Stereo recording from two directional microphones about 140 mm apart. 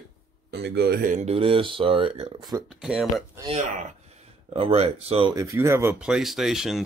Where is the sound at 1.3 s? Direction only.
40° right (ahead or behind).